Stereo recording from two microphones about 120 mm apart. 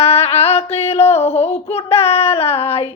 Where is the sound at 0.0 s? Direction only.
60° left (ahead or behind).